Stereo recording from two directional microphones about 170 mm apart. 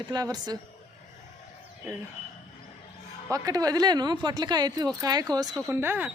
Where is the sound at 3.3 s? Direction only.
20° right (ahead or behind).